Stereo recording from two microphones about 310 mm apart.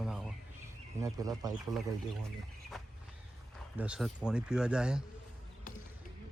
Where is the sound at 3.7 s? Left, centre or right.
Centre.